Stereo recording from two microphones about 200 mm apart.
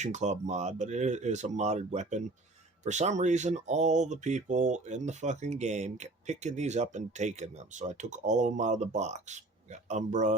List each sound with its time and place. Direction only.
0.0 s speech: 35° right (ahead or behind)